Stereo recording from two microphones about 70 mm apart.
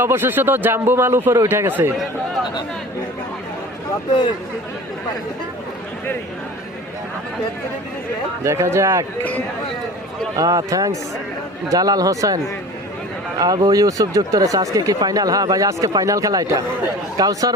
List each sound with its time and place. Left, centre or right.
0.0 s speech: right
8.4 s speech: right
10.3 s speech: right
13.4 s speech: right
13.8 s speech: right